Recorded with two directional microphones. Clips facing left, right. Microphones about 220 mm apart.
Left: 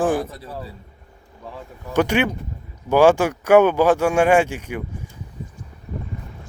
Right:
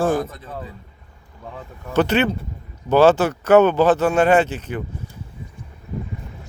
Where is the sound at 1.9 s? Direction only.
10° left (ahead or behind).